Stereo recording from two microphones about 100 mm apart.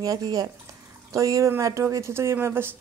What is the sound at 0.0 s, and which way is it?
Speech, 40° right (ahead or behind).